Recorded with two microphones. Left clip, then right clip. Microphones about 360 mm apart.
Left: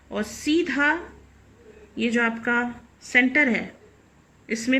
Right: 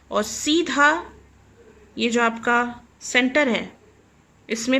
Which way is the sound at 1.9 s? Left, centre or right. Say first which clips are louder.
Right 3 dB; centre.